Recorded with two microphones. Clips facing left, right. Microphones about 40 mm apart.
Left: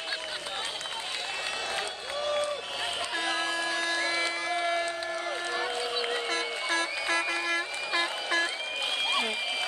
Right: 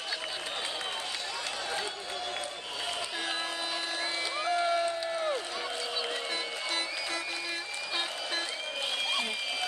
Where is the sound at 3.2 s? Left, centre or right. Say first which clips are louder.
Left 7 dB; left.